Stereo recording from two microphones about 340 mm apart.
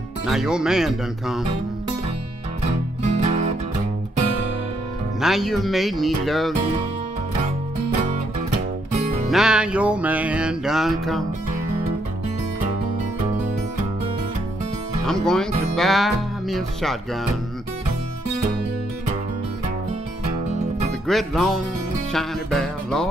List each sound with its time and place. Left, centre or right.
0.3 s music: centre
3.2 s music: centre
5.2 s music: centre
9.3 s music: centre
15.0 s music: centre
21.1 s music: centre